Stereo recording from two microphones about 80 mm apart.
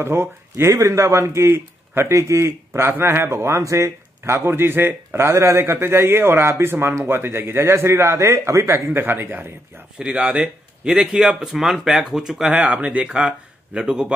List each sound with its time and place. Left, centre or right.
0.0 s speech: right
8.9 s speech: right
9.9 s speech: centre